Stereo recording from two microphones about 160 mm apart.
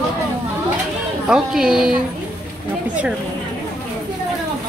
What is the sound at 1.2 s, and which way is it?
Speech, 5° right (ahead or behind).